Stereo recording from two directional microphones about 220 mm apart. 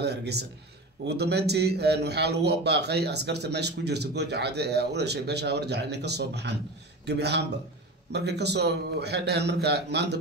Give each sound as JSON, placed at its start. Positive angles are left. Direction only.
{"t": 0.0, "sound": "a man's voice", "side_deg": -50}